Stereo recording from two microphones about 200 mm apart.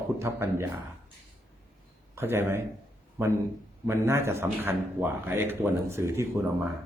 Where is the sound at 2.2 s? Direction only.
10° right (ahead or behind).